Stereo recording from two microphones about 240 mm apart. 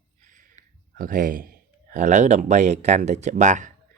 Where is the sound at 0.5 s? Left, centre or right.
Right.